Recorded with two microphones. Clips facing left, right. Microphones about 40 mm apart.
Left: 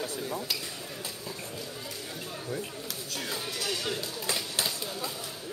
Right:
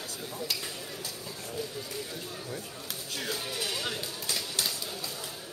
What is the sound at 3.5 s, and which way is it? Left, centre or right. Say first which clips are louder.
Speech: left 3 dB; centre.